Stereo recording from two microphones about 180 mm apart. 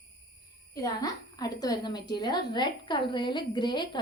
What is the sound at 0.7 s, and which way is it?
A woman's voice, 20° left (ahead or behind).